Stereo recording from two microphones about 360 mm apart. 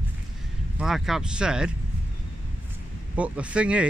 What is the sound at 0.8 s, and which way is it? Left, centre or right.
Speech, centre.